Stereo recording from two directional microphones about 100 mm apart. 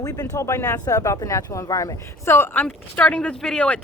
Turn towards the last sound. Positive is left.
turn(degrees=10)  # may be behind; listen again after turning